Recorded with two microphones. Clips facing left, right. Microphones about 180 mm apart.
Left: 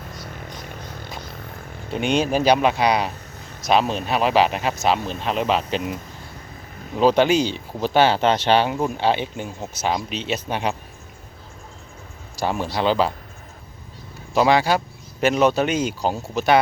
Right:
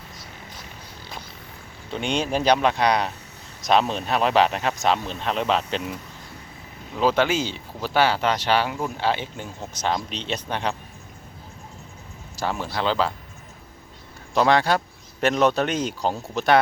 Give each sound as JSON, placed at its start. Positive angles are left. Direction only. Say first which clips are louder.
{"t": 0.7, "sound": "vehicle", "louder": "left 7 dB", "side_deg": 55}
{"t": 1.9, "sound": "speech", "louder": "left 4 dB", "side_deg": 10}
{"t": 7.0, "sound": "speech", "louder": "left 4 dB", "side_deg": 15}
{"t": 12.4, "sound": "speech", "louder": "left 4 dB", "side_deg": 15}
{"t": 14.3, "sound": "speech", "louder": "left 2 dB", "side_deg": 5}